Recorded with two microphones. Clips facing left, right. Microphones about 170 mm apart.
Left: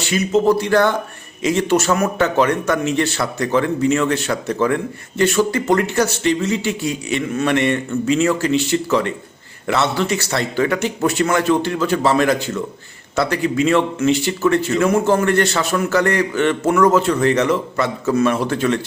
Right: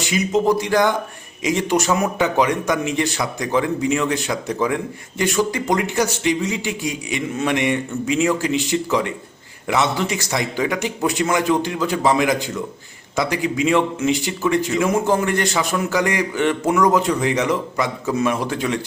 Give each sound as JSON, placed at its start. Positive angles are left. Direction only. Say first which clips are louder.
{"t": 0.0, "sound": "a man's voice", "louder": "left 2 dB", "side_deg": -15}